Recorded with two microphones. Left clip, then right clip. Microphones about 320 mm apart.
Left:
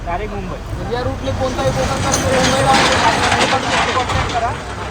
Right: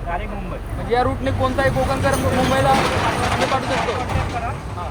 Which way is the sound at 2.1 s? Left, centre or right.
Left.